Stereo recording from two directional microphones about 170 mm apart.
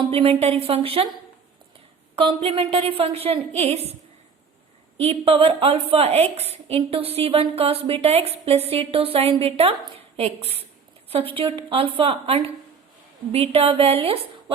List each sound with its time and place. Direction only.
0.1 s a woman's voice: 35° right (ahead or behind)
2.1 s a woman's voice: 35° right (ahead or behind)
4.9 s a woman's voice: 35° right (ahead or behind)